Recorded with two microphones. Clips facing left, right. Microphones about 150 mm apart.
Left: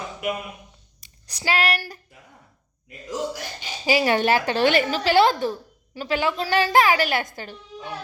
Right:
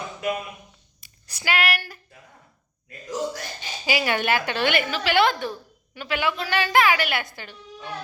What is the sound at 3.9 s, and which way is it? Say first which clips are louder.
A woman's voice: left 4 dB; 35° left (ahead or behind).